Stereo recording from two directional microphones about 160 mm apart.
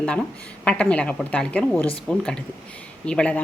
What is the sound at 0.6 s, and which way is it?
A woman's voice, 5° left (ahead or behind).